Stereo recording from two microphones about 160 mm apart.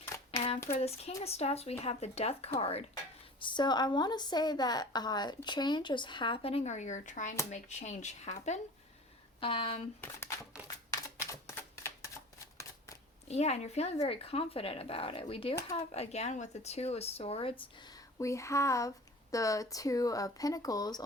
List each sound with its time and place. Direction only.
0.8 s speech: 40° left (ahead or behind)
9.4 s speech: 35° left (ahead or behind)
10.0 s speech: 15° left (ahead or behind)
11.3 s typewriter: 15° left (ahead or behind)
13.2 s speech: 40° left (ahead or behind); by 21.0 s 25° left (ahead or behind)